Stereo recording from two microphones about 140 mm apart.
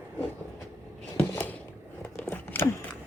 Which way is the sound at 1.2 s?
15° left (ahead or behind).